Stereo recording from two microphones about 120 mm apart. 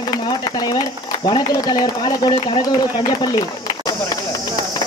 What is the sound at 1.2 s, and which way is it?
A man's voice, 40° left (ahead or behind).